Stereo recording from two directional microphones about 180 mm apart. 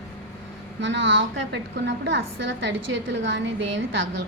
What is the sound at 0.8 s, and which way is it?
A woman's voice, 80° right.